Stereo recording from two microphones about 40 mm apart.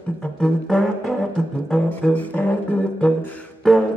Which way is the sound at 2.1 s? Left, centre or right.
Left.